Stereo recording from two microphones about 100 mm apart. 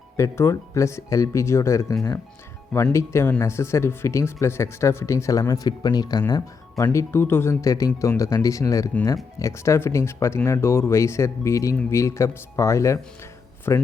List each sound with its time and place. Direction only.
0.2 s speech: 30° left (ahead or behind)